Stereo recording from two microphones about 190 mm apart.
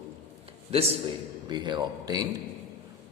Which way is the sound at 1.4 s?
25° right (ahead or behind).